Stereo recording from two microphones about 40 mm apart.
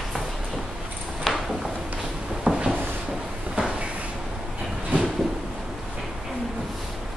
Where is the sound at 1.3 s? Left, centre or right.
Centre.